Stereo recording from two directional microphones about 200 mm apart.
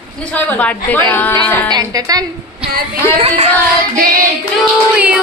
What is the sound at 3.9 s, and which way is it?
Female singing, 45° right (ahead or behind).